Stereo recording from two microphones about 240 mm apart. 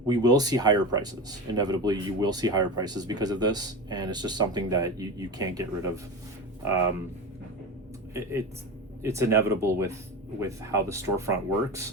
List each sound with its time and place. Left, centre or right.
0.1 s speech: centre
8.1 s speech: centre